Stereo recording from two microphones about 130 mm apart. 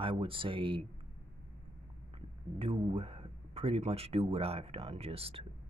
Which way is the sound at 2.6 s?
45° right (ahead or behind).